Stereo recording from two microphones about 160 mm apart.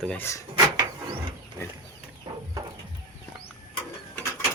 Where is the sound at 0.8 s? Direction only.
25° right (ahead or behind).